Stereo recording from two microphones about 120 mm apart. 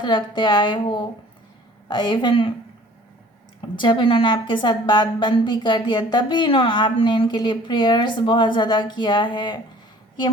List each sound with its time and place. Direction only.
0.0 s speech: 40° left (ahead or behind)
3.6 s speech: 45° left (ahead or behind)